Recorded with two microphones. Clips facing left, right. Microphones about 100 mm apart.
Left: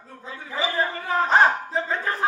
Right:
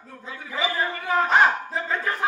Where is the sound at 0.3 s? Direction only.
30° left (ahead or behind).